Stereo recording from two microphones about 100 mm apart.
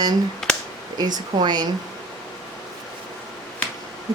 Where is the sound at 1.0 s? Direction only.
45° right (ahead or behind).